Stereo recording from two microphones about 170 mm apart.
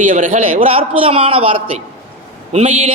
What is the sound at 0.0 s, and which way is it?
Speech, 50° right (ahead or behind).